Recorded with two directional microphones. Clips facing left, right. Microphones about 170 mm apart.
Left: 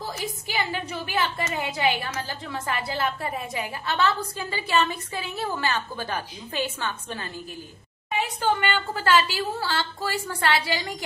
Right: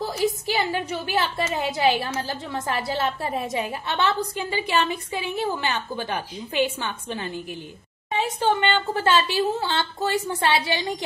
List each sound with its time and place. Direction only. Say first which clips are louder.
0.0 s a woman's voice: right 8 dB; 30° right (ahead or behind)